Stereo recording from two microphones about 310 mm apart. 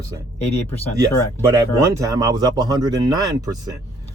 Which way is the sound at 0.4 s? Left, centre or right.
Left.